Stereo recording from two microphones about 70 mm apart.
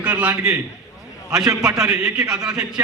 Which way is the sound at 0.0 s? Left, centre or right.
Centre.